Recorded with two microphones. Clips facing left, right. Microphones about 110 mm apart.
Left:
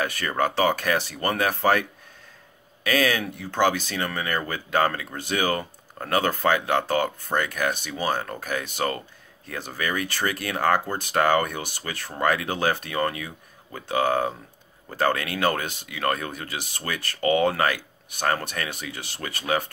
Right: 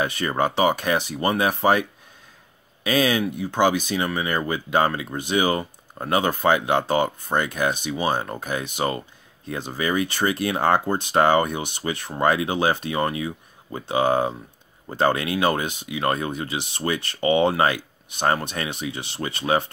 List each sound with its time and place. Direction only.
0.0 s speech: 20° right (ahead or behind)